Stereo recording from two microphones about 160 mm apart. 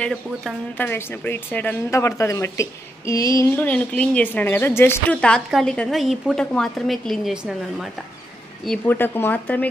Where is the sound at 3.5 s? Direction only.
10° left (ahead or behind).